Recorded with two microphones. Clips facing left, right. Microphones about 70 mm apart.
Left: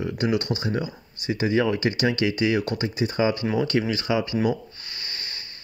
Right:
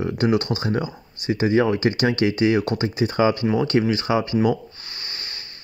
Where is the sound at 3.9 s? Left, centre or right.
Right.